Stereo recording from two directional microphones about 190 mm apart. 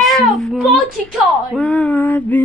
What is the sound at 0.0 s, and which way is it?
Speech, centre (ahead or behind).